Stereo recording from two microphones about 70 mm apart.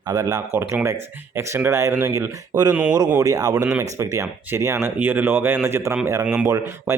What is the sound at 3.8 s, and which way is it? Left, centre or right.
Speech, right.